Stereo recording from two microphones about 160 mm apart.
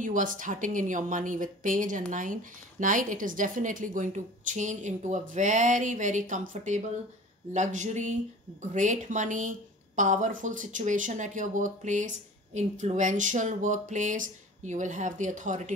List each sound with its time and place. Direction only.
0.0 s a woman's voice: 55° right (ahead or behind)